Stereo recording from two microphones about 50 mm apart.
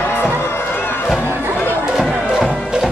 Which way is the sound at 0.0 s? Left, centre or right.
Left.